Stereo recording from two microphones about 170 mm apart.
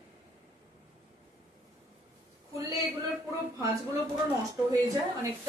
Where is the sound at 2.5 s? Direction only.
20° right (ahead or behind).